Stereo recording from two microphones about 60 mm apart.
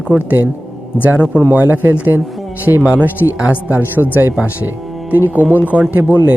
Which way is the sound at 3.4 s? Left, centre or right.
Right.